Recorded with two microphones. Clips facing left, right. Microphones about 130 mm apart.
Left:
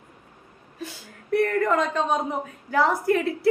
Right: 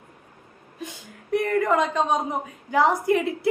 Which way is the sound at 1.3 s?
10° right (ahead or behind).